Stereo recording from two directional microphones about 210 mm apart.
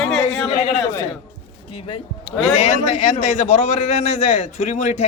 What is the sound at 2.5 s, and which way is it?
A man's voice, 30° left (ahead or behind).